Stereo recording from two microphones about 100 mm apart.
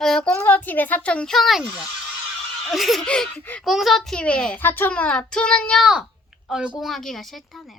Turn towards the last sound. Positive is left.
turn(degrees=0)  # may be behind; listen again after turning